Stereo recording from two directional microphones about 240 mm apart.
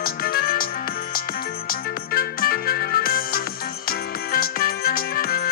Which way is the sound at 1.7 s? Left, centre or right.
Left.